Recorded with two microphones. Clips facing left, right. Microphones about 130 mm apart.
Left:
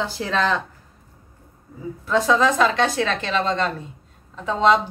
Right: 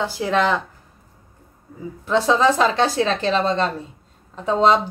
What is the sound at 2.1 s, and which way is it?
A woman's voice, 30° right (ahead or behind).